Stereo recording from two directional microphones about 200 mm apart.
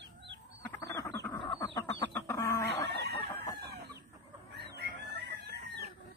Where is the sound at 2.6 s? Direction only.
55° right (ahead or behind).